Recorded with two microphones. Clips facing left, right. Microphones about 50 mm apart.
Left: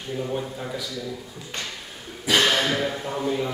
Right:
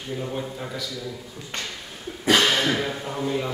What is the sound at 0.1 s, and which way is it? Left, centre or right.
Speech, centre.